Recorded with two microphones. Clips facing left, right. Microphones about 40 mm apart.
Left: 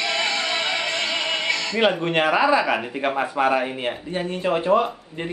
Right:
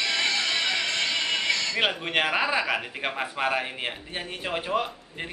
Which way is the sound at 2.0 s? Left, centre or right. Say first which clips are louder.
Left 6 dB; centre.